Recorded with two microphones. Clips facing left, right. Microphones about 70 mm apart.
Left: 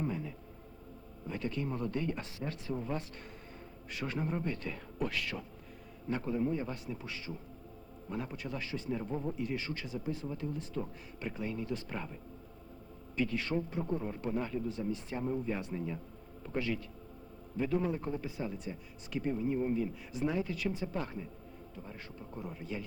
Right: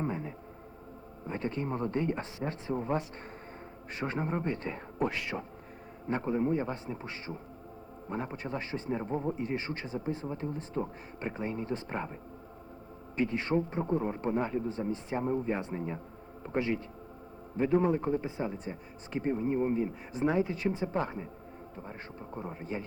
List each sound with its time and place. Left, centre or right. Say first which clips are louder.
0.0 s music: right 2 dB; right
1.3 s speech: right 3 dB; right
13.1 s a man's voice: right 4 dB; right